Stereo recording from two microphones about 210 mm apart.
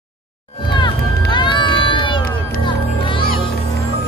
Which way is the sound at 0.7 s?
20° left (ahead or behind).